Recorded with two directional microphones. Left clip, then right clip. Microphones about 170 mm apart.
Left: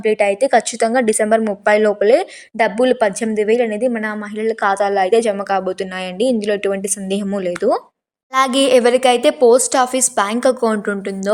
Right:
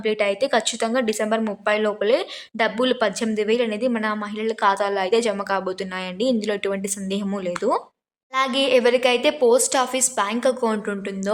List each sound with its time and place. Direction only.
0.0 s a woman's voice: 25° left (ahead or behind)
8.3 s a woman's voice: 35° left (ahead or behind)